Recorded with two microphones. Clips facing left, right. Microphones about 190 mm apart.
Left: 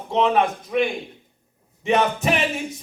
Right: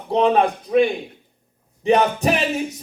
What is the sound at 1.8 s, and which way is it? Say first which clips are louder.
Speech: right 3 dB; 35° right (ahead or behind).